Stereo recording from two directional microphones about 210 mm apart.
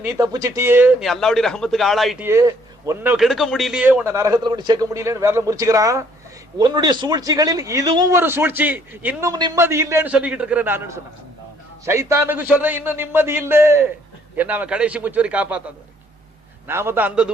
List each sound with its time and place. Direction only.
0.0 s speech: 15° right (ahead or behind); by 2.2 s centre (ahead or behind)
2.2 s a man's voice: 15° right (ahead or behind)